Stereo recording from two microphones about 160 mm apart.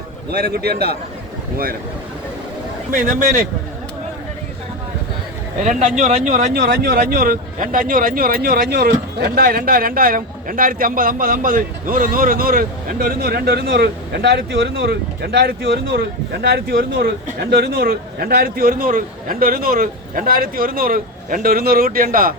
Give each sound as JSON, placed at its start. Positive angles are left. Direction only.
{"t": 0.3, "sound": "a man's voice", "side_deg": -75}
{"t": 2.9, "sound": "speech", "side_deg": -55}
{"t": 5.6, "sound": "speech", "side_deg": -45}
{"t": 6.5, "sound": "speech", "side_deg": -75}